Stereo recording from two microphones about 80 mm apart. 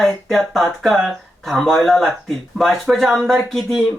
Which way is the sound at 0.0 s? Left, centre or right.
Centre.